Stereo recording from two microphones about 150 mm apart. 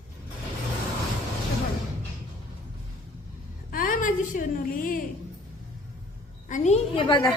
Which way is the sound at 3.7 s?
65° left (ahead or behind).